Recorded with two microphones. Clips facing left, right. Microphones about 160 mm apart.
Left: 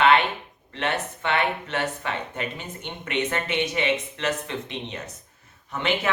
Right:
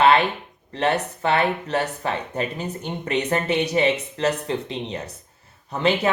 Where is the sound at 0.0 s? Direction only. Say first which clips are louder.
Right 2 dB; 35° right (ahead or behind).